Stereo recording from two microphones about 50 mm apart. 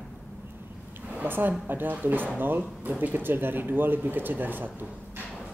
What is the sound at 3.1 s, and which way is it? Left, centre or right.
Speech, right.